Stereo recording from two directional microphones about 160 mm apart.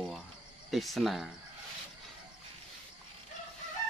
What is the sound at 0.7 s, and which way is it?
Speech, centre (ahead or behind).